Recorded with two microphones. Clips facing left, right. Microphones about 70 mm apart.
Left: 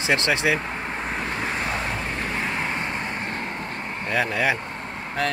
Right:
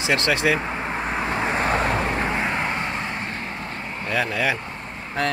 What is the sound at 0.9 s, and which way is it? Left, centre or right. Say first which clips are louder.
Vehicle: right 3 dB; centre.